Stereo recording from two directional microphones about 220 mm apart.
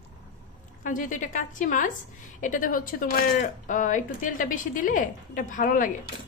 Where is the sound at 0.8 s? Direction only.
35° left (ahead or behind).